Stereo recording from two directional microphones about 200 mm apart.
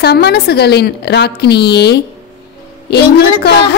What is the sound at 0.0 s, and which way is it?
A woman's voice, 55° left (ahead or behind).